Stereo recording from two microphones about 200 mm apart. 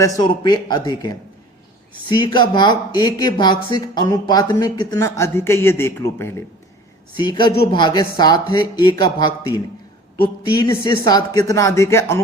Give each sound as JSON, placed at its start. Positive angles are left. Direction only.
{"t": 0.2, "sound": "speech", "side_deg": 20}
{"t": 7.2, "sound": "speech", "side_deg": 25}
{"t": 10.6, "sound": "speech", "side_deg": 20}